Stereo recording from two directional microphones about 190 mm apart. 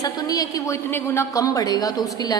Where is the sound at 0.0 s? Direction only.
20° left (ahead or behind).